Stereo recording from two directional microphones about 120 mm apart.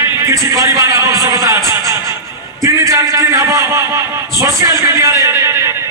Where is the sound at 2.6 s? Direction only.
30° right (ahead or behind).